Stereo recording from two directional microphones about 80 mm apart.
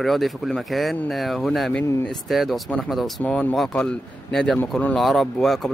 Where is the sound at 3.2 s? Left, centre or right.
Centre.